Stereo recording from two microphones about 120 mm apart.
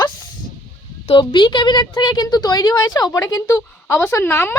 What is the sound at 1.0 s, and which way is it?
A woman's voice, 40° left (ahead or behind).